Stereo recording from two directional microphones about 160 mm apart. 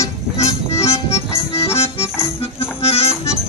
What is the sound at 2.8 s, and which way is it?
Accordion, 40° left (ahead or behind).